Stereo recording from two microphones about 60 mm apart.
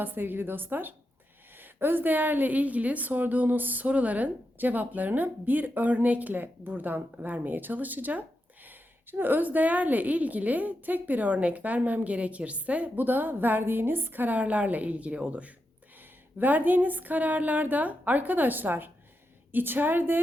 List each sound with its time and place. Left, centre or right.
0.0 s a woman's voice: right